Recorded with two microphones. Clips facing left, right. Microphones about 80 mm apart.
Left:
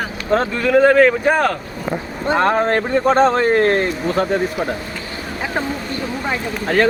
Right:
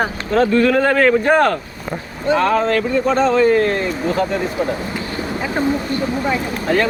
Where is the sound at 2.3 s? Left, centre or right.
Left.